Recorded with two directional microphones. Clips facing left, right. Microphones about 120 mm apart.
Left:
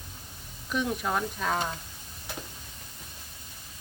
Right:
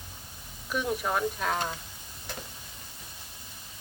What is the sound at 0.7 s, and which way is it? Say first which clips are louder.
Speech: even; 5° right (ahead or behind).